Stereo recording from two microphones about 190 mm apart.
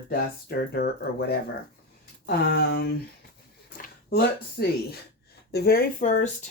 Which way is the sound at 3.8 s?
55° left (ahead or behind).